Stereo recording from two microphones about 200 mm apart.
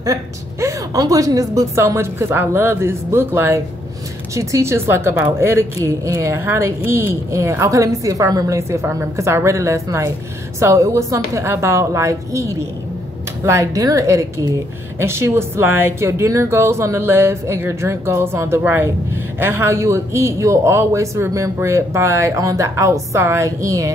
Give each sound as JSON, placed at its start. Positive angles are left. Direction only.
{"t": 0.0, "sound": "a woman's voice", "side_deg": -15}